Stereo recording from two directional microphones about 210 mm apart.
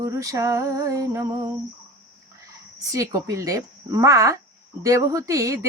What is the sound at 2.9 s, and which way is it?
Speech, 15° right (ahead or behind).